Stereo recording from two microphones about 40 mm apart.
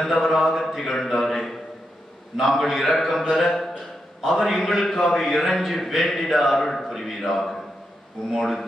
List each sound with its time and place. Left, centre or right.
0.0 s a man's voice: centre
0.6 s a man's voice: centre
8.4 s a man's voice: centre